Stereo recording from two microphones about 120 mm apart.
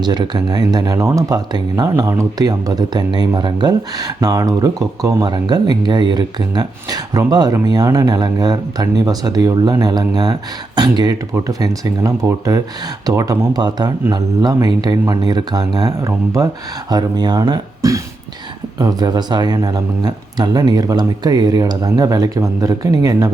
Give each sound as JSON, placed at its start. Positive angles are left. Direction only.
{"t": 0.0, "sound": "speech", "side_deg": -35}